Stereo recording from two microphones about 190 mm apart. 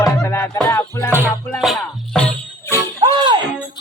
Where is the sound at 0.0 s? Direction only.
15° left (ahead or behind).